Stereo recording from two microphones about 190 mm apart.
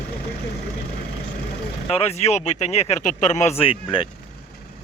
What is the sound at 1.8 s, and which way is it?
Speech, 30° left (ahead or behind).